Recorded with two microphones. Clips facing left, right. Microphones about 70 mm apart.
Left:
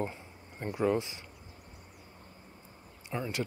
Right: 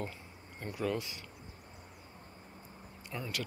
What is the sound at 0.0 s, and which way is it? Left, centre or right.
Speech, left.